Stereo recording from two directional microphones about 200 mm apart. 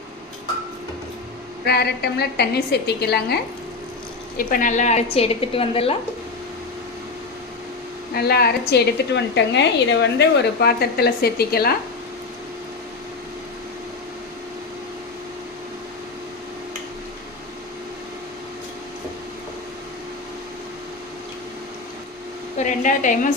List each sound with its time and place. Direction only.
1.6 s a woman's voice: 55° left (ahead or behind)
4.4 s a woman's voice: 45° left (ahead or behind); by 6.0 s 30° left (ahead or behind)
8.1 s a woman's voice: 50° left (ahead or behind)
22.5 s a sound: 40° left (ahead or behind)